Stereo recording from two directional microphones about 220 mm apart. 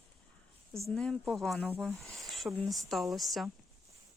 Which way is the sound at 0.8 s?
Centre (ahead or behind).